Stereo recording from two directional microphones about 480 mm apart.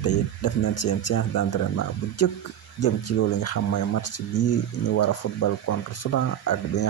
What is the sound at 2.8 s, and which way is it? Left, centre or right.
Speech, left.